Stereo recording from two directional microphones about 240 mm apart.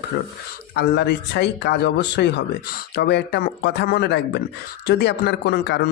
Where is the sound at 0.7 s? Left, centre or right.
Left.